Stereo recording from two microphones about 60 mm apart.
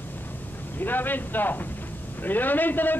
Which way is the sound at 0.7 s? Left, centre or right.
Left.